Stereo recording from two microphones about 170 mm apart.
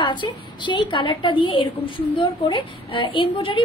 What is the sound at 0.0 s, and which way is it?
A woman's voice, 30° left (ahead or behind).